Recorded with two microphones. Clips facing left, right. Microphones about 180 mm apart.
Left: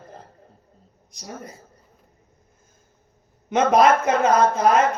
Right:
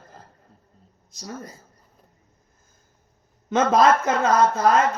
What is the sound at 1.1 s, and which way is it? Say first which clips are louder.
Speech: right 1 dB; 20° left (ahead or behind).